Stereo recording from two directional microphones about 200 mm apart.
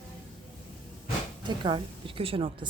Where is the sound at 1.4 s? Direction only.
25° right (ahead or behind).